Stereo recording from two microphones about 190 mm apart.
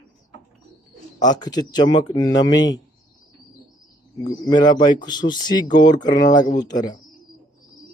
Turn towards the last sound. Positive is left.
turn(degrees=20)  # may be behind; listen again after turning